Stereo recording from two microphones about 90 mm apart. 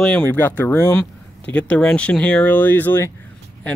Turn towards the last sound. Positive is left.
turn(degrees=25)  # may be behind; listen again after turning